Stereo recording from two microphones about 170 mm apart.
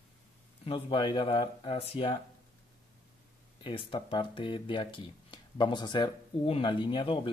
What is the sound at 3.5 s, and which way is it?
Speech, 30° left (ahead or behind).